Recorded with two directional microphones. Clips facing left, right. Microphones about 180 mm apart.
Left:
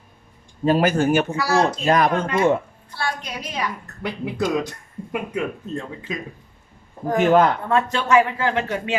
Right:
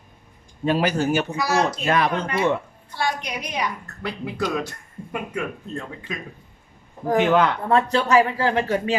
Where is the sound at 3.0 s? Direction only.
15° right (ahead or behind).